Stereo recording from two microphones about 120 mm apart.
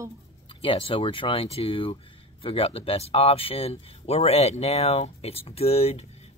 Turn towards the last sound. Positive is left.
turn(degrees=60)  # may be behind; listen again after turning